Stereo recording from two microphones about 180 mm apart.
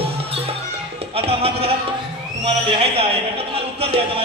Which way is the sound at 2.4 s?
35° right (ahead or behind).